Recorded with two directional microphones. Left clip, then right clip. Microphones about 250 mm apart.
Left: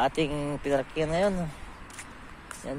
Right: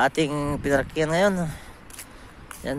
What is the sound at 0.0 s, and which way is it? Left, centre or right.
Speech, right.